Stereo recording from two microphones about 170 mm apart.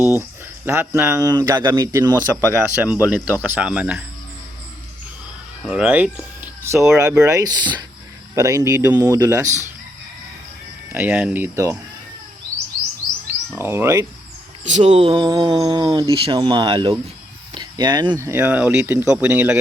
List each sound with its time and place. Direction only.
0.1 s speech: 15° right (ahead or behind)
5.6 s speech: 5° right (ahead or behind)
10.9 s speech: 10° right (ahead or behind)
13.6 s speech: 15° right (ahead or behind)
14.6 s speech: 45° right (ahead or behind)
17.5 s a sound: 25° right (ahead or behind)
18.1 s speech: 15° right (ahead or behind)